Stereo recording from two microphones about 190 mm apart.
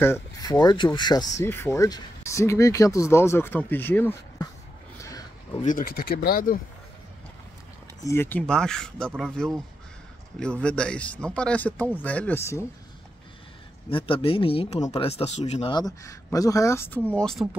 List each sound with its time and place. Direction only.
0.0 s speech: 15° left (ahead or behind)
5.6 s speech: 45° left (ahead or behind)
8.0 s speech: 15° left (ahead or behind)
10.6 s speech: 5° left (ahead or behind)
13.8 s speech: 30° left (ahead or behind)
15.7 s speech: 20° left (ahead or behind)